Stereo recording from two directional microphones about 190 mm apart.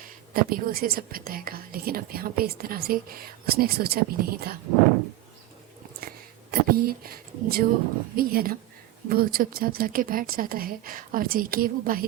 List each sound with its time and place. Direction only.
0.0 s speech: 50° right (ahead or behind)
6.5 s speech: 50° right (ahead or behind)